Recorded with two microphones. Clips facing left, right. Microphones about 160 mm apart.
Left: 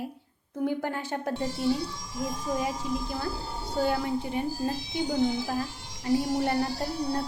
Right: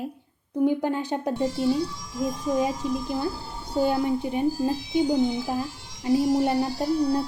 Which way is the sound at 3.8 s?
20° right (ahead or behind).